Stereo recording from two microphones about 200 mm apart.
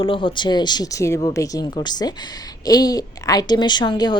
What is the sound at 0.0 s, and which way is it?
A woman's voice, 25° left (ahead or behind).